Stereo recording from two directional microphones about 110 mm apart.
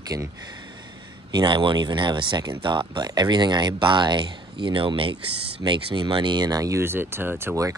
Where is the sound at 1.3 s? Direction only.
45° right (ahead or behind).